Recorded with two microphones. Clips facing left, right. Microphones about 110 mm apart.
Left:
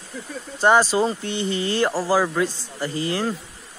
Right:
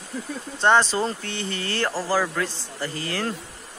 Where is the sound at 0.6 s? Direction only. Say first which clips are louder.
Left 2 dB; 10° left (ahead or behind).